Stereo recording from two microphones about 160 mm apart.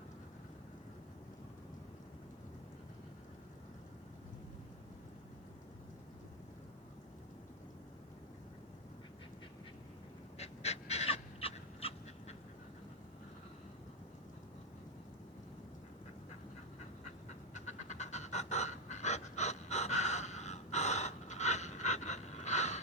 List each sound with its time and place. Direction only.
10.3 s dog: 40° left (ahead or behind)
17.2 s pant: 45° left (ahead or behind)